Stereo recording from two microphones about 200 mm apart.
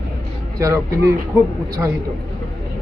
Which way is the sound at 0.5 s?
15° right (ahead or behind).